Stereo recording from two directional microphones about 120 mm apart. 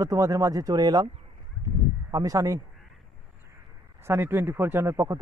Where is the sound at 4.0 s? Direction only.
20° right (ahead or behind).